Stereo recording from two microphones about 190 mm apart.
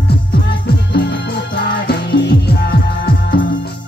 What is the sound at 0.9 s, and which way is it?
Music, 65° left (ahead or behind).